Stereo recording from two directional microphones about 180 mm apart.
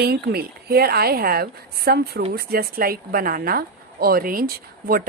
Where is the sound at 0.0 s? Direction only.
60° right (ahead or behind).